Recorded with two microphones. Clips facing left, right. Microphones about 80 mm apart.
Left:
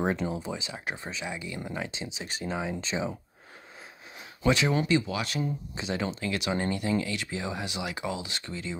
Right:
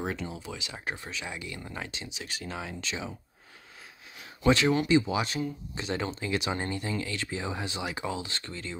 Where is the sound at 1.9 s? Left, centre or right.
Left.